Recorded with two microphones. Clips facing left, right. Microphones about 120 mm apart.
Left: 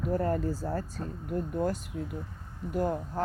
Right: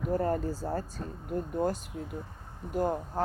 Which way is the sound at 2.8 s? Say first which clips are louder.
Even; 25° right (ahead or behind).